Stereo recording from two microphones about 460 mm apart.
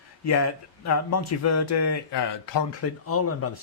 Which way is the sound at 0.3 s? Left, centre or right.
Left.